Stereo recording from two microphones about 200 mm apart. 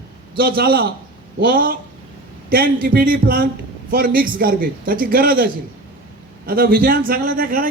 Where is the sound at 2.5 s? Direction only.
50° right (ahead or behind).